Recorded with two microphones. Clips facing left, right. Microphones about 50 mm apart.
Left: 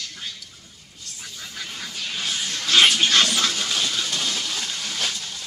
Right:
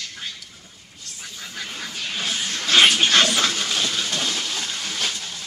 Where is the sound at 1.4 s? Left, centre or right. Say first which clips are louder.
Right 2 dB; centre.